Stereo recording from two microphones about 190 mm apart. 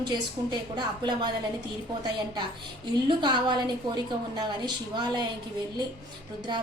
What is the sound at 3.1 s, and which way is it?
A woman's voice, 25° right (ahead or behind).